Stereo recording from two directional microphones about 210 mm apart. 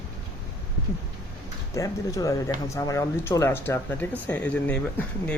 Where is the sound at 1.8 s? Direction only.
15° left (ahead or behind).